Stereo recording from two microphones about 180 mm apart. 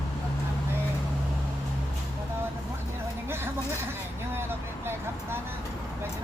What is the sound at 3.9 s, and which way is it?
Vehicle, 15° right (ahead or behind).